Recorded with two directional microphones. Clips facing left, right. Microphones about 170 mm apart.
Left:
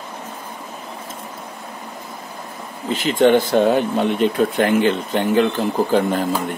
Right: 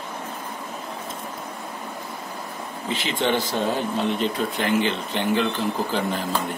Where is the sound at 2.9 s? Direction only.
45° left (ahead or behind).